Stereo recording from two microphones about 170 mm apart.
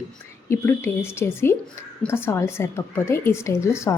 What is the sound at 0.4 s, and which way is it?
Speech, 15° left (ahead or behind).